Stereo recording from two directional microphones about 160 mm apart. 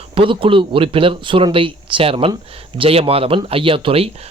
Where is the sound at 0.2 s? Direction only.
35° right (ahead or behind).